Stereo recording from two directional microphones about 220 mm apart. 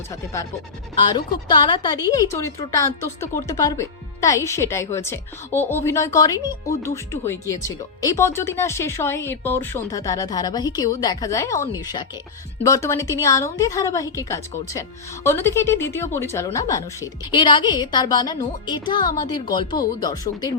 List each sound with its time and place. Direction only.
1.0 s speech: 20° left (ahead or behind)